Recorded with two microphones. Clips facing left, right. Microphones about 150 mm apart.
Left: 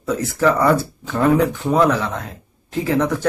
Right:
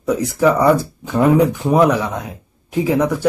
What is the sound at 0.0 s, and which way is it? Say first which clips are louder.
Speech: right 3 dB; 15° right (ahead or behind).